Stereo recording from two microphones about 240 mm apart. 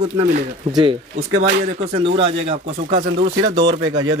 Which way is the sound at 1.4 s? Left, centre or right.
Right.